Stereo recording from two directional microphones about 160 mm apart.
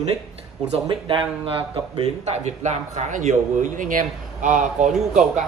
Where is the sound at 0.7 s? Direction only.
35° right (ahead or behind).